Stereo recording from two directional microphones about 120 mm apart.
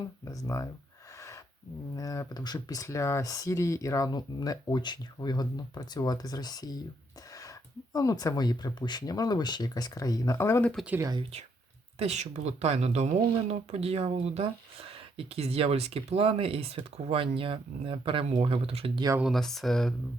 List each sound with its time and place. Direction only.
0.3 s speech: 25° left (ahead or behind)
2.0 s speech: 30° left (ahead or behind)
7.9 s speech: 30° left (ahead or behind)
10.6 s speech: 10° left (ahead or behind)
11.2 s speech: 60° right (ahead or behind)
19.2 s speech: centre (ahead or behind)